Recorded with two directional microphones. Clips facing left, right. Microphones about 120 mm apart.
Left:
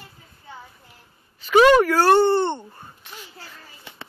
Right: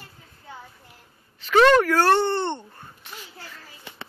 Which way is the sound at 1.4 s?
10° left (ahead or behind).